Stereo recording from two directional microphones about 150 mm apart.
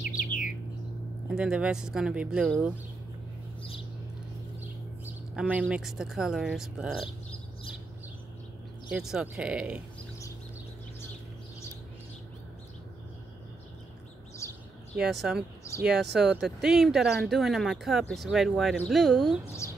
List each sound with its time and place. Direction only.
0.0 s bird: 65° left (ahead or behind)
1.3 s speech: 5° right (ahead or behind)
5.5 s speech: 5° right (ahead or behind)
8.9 s speech: 5° right (ahead or behind)
14.4 s bird: 20° left (ahead or behind)
15.0 s speech: 5° right (ahead or behind)
19.4 s a sound: 20° left (ahead or behind)